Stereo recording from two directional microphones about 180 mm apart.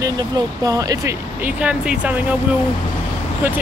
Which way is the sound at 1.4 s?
5° right (ahead or behind).